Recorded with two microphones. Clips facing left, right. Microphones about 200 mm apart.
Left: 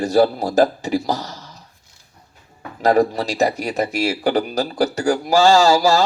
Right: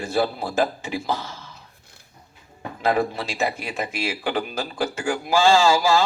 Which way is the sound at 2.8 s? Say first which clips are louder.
Left 6 dB; 40° left (ahead or behind).